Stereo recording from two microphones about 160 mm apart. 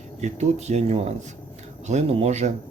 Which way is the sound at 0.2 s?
45° right (ahead or behind).